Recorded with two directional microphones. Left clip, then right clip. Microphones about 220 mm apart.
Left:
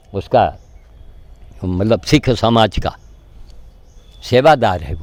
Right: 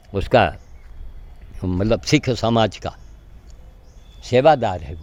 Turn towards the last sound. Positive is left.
turn(degrees=25)  # may be behind; listen again after turning